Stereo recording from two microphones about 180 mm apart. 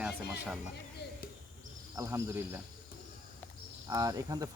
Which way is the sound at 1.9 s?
15° right (ahead or behind).